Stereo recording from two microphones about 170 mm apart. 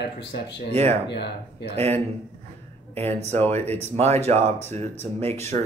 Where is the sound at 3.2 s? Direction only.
40° right (ahead or behind).